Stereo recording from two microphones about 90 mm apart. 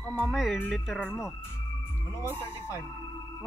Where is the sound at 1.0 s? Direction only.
25° left (ahead or behind).